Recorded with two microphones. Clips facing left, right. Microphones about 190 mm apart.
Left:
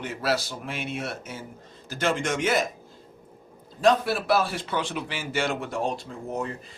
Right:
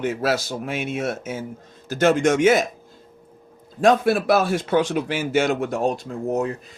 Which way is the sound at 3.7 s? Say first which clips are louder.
Right 5 dB; 50° right (ahead or behind).